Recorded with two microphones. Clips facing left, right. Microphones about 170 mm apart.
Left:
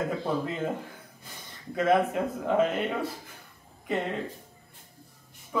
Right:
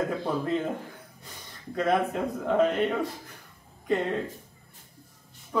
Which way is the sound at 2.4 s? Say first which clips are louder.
Right 2 dB; 5° left (ahead or behind).